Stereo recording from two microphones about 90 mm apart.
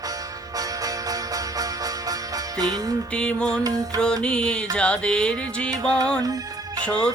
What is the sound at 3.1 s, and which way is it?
Music, 10° left (ahead or behind).